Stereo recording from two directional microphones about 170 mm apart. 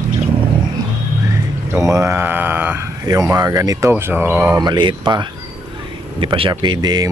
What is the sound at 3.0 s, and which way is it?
Speech, 20° right (ahead or behind).